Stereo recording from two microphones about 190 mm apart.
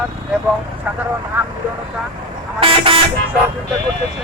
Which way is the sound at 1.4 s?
10° right (ahead or behind).